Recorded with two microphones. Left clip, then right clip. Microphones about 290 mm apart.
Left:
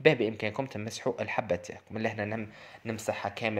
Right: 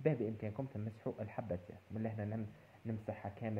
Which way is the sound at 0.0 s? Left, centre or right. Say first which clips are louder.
Left 13 dB; left.